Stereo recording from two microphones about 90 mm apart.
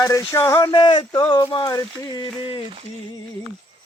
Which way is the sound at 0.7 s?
60° left (ahead or behind).